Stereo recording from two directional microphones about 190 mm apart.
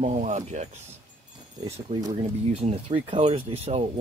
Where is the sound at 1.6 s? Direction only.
30° right (ahead or behind).